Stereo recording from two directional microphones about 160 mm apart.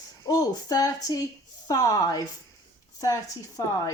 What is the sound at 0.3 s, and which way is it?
Speech, 25° left (ahead or behind).